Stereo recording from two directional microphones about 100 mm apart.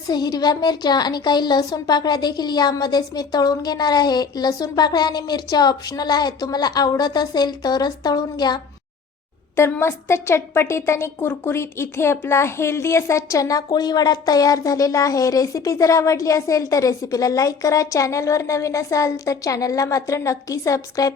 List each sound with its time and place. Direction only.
0.1 s speech: 45° left (ahead or behind)
9.6 s a woman's voice: 25° left (ahead or behind)